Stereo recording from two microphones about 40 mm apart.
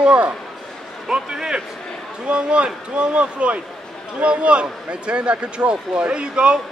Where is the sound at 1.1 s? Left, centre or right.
Centre.